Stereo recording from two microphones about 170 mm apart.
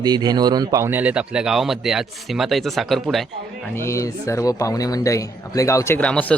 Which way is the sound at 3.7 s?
15° left (ahead or behind).